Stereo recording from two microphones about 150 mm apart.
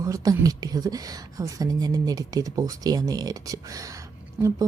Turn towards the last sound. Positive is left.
turn(degrees=-20)  # may be behind; listen again after turning